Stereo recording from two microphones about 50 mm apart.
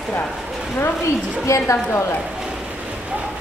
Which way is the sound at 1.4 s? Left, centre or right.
Left.